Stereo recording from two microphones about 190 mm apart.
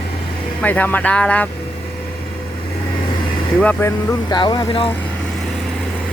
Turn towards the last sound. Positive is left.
turn(degrees=25)  # may be behind; listen again after turning